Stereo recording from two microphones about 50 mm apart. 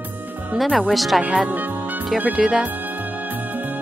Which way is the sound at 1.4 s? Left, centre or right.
Right.